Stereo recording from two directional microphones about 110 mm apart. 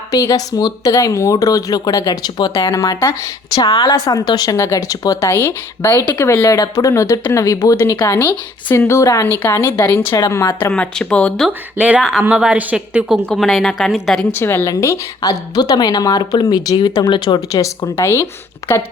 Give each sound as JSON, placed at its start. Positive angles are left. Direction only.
{"t": 0.1, "sound": "speech", "side_deg": 30}
{"t": 10.6, "sound": "speech", "side_deg": 10}
{"t": 11.4, "sound": "a woman's voice", "side_deg": -10}
{"t": 13.2, "sound": "a woman's voice", "side_deg": 0}
{"t": 14.3, "sound": "speech", "side_deg": 20}
{"t": 17.9, "sound": "speech", "side_deg": 25}